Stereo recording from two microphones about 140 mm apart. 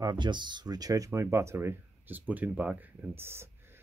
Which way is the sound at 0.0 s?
30° right (ahead or behind).